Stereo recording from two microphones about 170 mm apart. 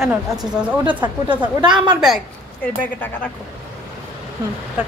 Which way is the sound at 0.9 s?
30° right (ahead or behind).